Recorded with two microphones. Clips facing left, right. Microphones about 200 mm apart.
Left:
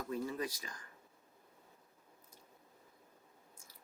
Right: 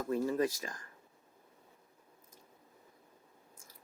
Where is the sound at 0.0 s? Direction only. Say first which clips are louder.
Right 7 dB; 45° right (ahead or behind).